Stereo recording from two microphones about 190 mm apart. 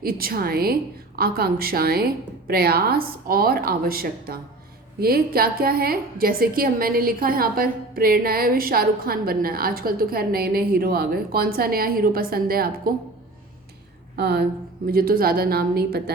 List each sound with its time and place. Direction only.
0.0 s a woman's voice: 50° right (ahead or behind)
14.2 s a woman's voice: 55° right (ahead or behind)